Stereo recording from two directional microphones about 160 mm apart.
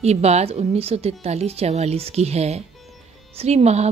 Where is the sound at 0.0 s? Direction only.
40° right (ahead or behind).